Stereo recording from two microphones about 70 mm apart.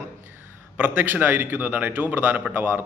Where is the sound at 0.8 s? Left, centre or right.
Right.